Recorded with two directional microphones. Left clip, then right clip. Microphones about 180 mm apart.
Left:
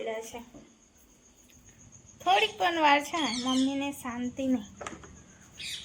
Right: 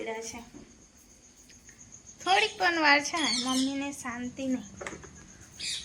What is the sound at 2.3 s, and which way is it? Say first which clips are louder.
A woman's voice: even; 15° left (ahead or behind).